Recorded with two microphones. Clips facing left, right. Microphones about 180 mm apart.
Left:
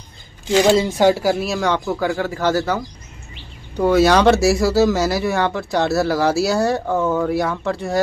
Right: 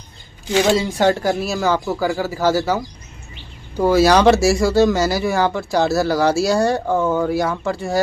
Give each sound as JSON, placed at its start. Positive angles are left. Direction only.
{"t": 0.9, "sound": "speech", "side_deg": 10}